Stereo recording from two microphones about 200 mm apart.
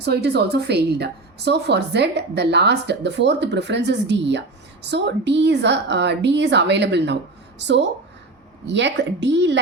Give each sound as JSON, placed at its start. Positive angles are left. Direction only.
{"t": 0.0, "sound": "a woman's voice", "side_deg": -55}